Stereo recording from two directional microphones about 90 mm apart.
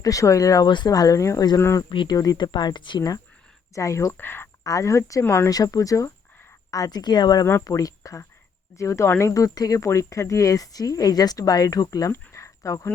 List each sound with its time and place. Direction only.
0.0 s speech: 40° left (ahead or behind)
1.9 s speech: 65° left (ahead or behind)
2.1 s speech: 45° left (ahead or behind)
3.8 s speech: 35° left (ahead or behind)
4.2 s speech: 25° left (ahead or behind)
4.6 s speech: 35° left (ahead or behind)
5.5 s speech: 45° left (ahead or behind)
7.6 s speech: 40° left (ahead or behind)
12.1 s a sound: 30° left (ahead or behind)